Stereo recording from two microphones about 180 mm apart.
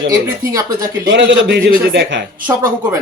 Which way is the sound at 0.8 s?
65° right (ahead or behind).